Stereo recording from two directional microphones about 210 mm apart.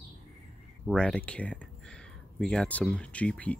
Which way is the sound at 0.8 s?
5° left (ahead or behind).